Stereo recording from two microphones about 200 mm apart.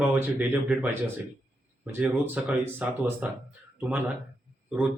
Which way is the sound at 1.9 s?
10° right (ahead or behind).